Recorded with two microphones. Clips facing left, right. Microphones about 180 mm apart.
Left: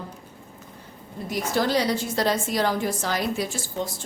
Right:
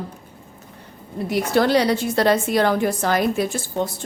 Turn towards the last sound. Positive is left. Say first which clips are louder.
# right 6 dB
turn(degrees=-55)  # may be behind; listen again after turning